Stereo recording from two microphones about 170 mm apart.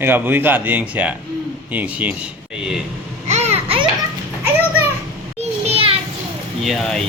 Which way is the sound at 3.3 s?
40° right (ahead or behind).